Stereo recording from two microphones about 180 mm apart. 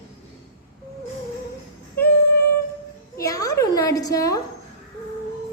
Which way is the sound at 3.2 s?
20° left (ahead or behind).